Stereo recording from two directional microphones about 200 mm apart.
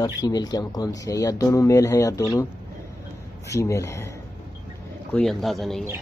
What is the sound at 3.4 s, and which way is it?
Speech, 15° left (ahead or behind).